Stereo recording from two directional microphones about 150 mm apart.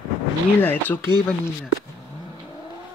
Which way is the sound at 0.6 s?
15° left (ahead or behind).